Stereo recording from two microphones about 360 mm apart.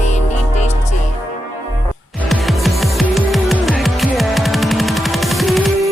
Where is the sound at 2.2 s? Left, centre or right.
Centre.